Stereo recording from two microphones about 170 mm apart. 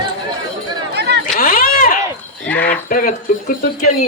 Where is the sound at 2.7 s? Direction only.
55° left (ahead or behind).